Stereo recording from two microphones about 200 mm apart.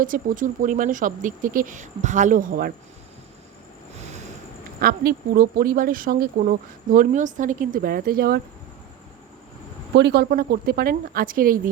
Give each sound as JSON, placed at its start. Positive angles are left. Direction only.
{"t": 0.0, "sound": "speech", "side_deg": -40}
{"t": 4.8, "sound": "speech", "side_deg": -45}
{"t": 9.9, "sound": "speech", "side_deg": -60}